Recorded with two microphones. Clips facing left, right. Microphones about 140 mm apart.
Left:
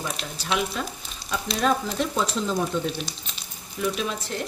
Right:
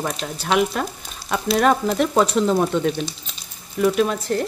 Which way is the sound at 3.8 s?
55° right (ahead or behind).